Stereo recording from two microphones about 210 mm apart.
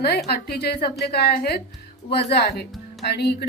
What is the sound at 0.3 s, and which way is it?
A woman's voice, 50° left (ahead or behind).